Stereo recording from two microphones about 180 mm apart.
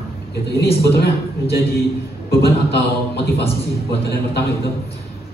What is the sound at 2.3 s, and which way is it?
A man's voice, 65° left (ahead or behind).